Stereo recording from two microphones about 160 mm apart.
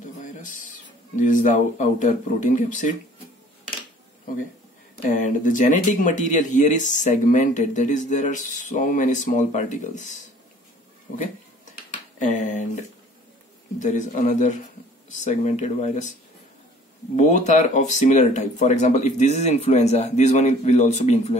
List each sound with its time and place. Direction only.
0.2 s speech: 55° left (ahead or behind)
5.0 s speech: 55° left (ahead or behind)
11.9 s speech: 50° left (ahead or behind)
17.2 s speech: 50° left (ahead or behind)